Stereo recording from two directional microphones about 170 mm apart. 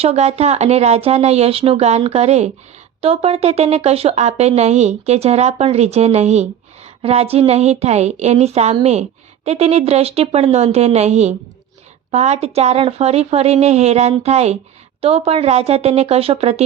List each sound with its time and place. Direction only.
0.0 s speech: 35° right (ahead or behind)